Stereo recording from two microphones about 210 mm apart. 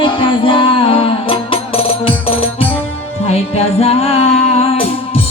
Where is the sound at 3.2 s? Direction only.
30° left (ahead or behind).